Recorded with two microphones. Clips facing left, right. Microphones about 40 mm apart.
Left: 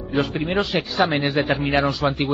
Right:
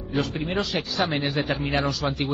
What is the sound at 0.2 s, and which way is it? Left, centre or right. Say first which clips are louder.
A man's voice: left 5 dB; left.